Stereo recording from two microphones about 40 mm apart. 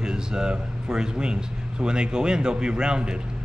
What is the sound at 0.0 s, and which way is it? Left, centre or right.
Speech, centre.